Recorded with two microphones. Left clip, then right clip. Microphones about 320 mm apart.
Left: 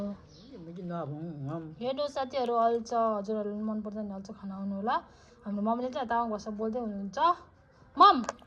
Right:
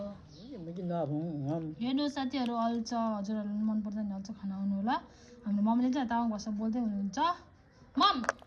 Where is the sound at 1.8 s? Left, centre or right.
Centre.